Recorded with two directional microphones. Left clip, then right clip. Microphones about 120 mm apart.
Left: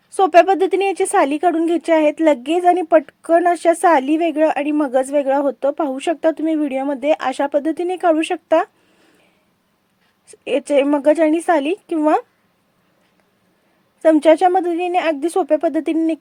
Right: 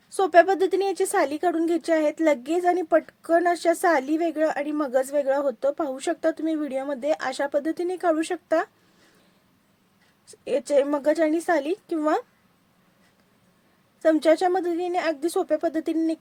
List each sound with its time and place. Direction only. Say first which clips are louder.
0.2 s speech: left 6 dB; 20° left (ahead or behind)
10.4 s speech: left 6 dB; 20° left (ahead or behind)
14.0 s speech: left 8 dB; 20° left (ahead or behind)